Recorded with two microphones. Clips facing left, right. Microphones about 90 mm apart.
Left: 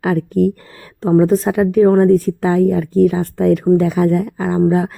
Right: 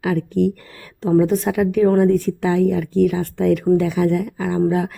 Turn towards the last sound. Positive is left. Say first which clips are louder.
# left 4 dB
turn(degrees=30)  # may be behind; listen again after turning